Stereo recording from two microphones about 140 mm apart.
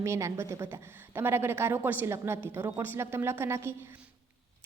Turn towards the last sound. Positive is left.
turn(degrees=-15)  # may be behind; listen again after turning